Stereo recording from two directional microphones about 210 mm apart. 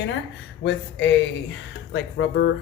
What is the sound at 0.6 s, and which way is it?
Speech, 60° left (ahead or behind).